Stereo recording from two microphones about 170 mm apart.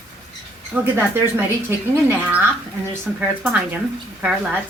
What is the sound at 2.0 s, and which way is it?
Speech, 10° right (ahead or behind).